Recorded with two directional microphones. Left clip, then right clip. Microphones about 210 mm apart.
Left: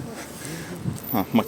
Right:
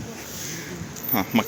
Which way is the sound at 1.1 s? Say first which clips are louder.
Even; 10° left (ahead or behind).